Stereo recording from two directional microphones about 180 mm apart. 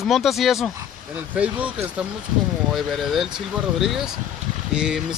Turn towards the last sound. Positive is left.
turn(degrees=-5)  # may be behind; listen again after turning